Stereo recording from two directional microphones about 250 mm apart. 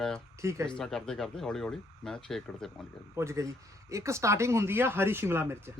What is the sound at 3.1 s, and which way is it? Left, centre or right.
A man's voice, centre.